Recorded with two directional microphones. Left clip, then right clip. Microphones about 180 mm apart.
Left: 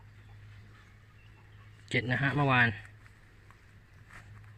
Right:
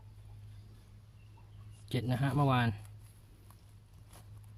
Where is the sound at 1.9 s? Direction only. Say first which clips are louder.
Left 6 dB; 20° right (ahead or behind).